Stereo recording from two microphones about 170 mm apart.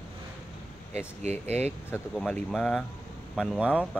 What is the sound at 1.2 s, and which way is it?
Speech, 40° right (ahead or behind).